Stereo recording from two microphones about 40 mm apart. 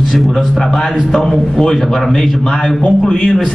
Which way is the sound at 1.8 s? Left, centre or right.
Centre.